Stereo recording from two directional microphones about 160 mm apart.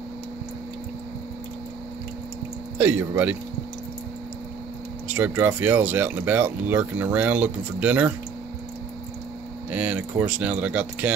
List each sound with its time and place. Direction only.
2.8 s speech: 10° right (ahead or behind)
5.0 s speech: 10° right (ahead or behind)
9.7 s speech: 10° right (ahead or behind)